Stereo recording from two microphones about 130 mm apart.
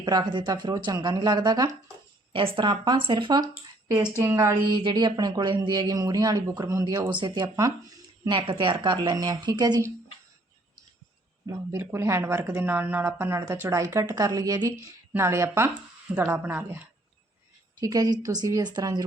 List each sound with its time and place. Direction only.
0.0 s speech: 30° right (ahead or behind)
2.3 s speech: 40° right (ahead or behind); by 4.5 s 20° right (ahead or behind)
4.7 s speech: 35° right (ahead or behind)
8.3 s speech: 40° right (ahead or behind)
11.4 s speech: 25° right (ahead or behind)
17.7 s speech: 30° right (ahead or behind)